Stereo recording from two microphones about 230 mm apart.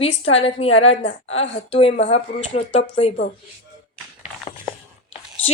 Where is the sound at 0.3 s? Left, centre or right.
Left.